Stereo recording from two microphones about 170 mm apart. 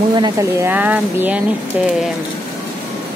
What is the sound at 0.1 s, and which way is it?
Speech, 20° right (ahead or behind).